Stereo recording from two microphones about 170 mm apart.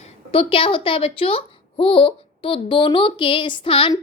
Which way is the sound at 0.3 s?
35° left (ahead or behind).